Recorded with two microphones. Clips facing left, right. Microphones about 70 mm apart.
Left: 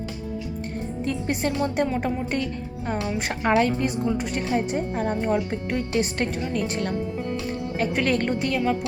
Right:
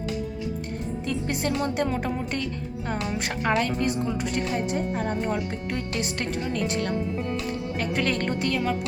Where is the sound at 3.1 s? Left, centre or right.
Left.